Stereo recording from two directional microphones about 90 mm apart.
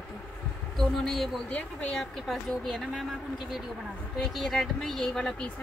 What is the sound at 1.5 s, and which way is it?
Speech, 15° left (ahead or behind).